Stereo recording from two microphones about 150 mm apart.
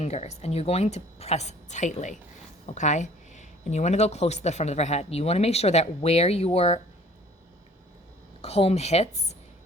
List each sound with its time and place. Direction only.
0.0 s speech: 45° left (ahead or behind)
8.4 s speech: 40° left (ahead or behind)